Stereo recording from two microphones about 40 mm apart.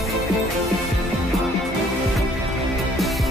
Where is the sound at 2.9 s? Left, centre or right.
Centre.